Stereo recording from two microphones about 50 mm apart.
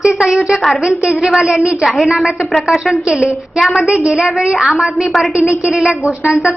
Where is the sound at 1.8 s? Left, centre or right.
Centre.